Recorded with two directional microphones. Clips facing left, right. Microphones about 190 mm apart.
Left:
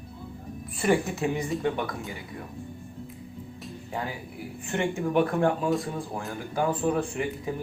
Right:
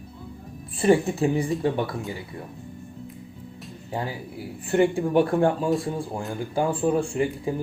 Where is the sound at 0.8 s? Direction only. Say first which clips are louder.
Right 5 dB; 30° right (ahead or behind).